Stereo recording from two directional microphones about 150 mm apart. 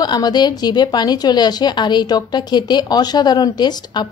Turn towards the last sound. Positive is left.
turn(degrees=30)  # may be behind; listen again after turning